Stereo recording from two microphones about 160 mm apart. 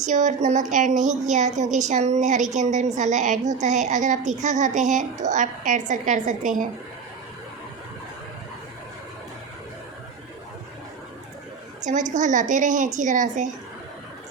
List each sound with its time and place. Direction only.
0.0 s speech: 50° right (ahead or behind)
11.8 s speech: 50° right (ahead or behind)